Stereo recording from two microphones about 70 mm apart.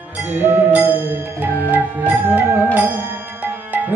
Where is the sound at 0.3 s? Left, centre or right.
Right.